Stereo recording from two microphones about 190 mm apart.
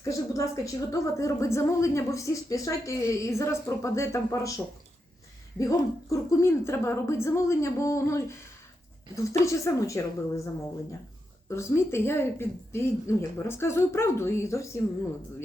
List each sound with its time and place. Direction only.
0.0 s a woman's voice: 15° left (ahead or behind)
9.4 s a woman's voice: 15° left (ahead or behind)